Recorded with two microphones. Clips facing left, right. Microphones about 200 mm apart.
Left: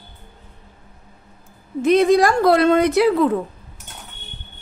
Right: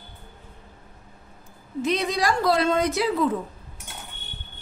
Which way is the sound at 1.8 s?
50° left (ahead or behind).